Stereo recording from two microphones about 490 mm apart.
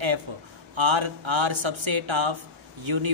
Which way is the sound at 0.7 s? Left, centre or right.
Right.